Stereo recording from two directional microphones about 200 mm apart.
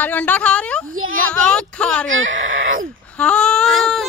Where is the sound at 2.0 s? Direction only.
75° right (ahead or behind).